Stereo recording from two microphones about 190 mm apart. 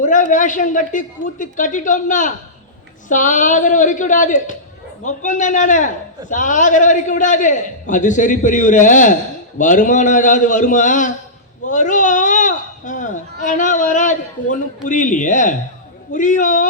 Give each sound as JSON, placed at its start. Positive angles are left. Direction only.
{"t": 0.0, "sound": "a man's voice", "side_deg": 40}
{"t": 11.7, "sound": "a sound", "side_deg": 40}
{"t": 13.4, "sound": "a man's voice", "side_deg": 40}